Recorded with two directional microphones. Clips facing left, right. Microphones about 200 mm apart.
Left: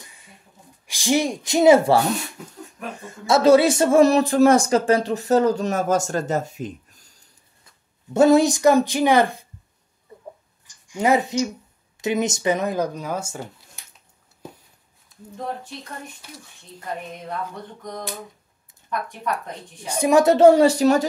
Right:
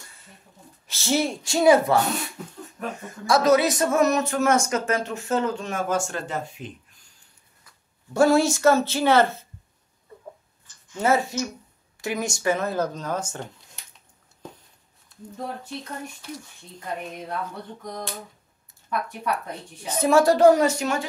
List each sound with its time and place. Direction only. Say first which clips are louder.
0.0 s a sound: left 2 dB; 15° left (ahead or behind)
0.8 s speech: left 3 dB; 15° left (ahead or behind)
3.1 s speech: left 4 dB; 25° left (ahead or behind); by 7.1 s 40° left (ahead or behind)
7.6 s speech: left 6 dB; 20° left (ahead or behind)
10.7 s speech: left 3 dB; 15° left (ahead or behind)
19.9 s a woman's voice: left 2 dB; 15° left (ahead or behind); by 21.0 s 35° left (ahead or behind)